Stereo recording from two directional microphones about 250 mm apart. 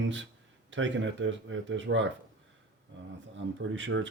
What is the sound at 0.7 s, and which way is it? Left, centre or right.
Speech, right.